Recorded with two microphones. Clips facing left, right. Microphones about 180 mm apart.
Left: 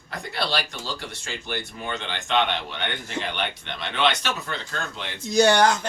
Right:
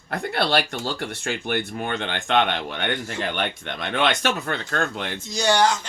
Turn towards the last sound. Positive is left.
turn(degrees=55)  # may be behind; listen again after turning